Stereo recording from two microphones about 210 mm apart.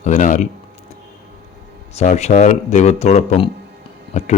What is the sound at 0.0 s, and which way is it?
Speech, 35° left (ahead or behind).